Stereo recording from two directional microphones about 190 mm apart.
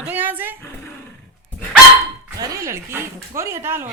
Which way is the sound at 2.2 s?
20° right (ahead or behind).